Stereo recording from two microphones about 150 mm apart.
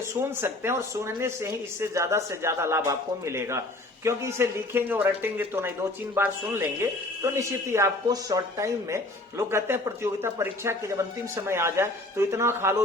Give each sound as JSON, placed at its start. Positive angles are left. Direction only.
{"t": 0.2, "sound": "speech", "side_deg": -15}